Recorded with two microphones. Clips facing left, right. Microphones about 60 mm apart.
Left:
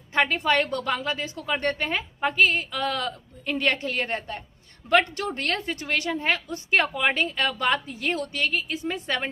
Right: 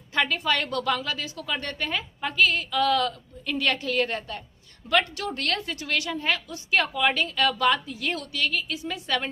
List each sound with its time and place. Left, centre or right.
0.1 s a woman's voice: left